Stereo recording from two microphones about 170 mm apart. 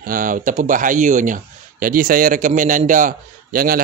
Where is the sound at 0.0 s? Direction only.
55° right (ahead or behind).